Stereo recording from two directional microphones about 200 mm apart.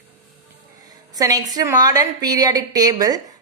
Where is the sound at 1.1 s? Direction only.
20° right (ahead or behind).